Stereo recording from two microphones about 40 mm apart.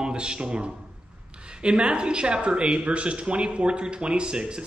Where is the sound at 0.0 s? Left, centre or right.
Right.